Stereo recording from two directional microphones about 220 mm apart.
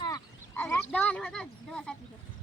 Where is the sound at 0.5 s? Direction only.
10° left (ahead or behind).